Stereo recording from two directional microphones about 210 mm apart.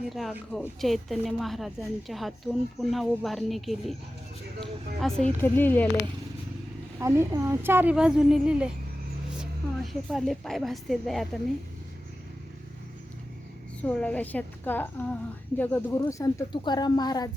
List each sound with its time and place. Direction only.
0.1 s speech: centre (ahead or behind)
4.9 s speech: centre (ahead or behind)
7.0 s a woman's voice: 15° right (ahead or behind)
13.8 s speech: 5° left (ahead or behind)